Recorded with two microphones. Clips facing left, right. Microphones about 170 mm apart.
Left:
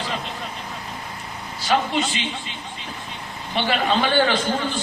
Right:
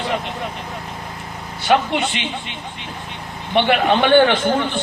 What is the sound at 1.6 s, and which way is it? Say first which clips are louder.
A man's voice: right 4 dB; 65° right (ahead or behind).